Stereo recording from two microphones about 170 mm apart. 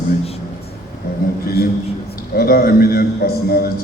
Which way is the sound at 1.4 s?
65° left (ahead or behind).